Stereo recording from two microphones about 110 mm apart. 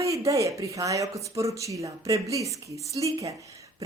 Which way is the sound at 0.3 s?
30° right (ahead or behind).